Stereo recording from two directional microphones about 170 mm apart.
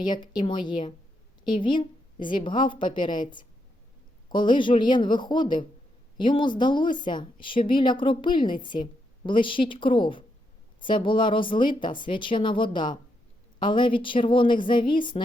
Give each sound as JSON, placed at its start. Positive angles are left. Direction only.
{"t": 0.1, "sound": "a woman's voice", "side_deg": 25}
{"t": 4.3, "sound": "a woman's voice", "side_deg": 30}